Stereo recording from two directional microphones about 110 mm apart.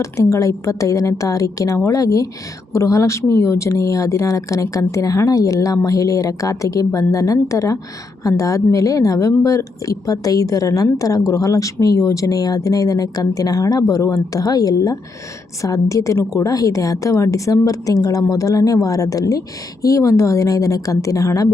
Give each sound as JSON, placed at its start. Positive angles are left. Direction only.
{"t": 0.0, "sound": "speech", "side_deg": 30}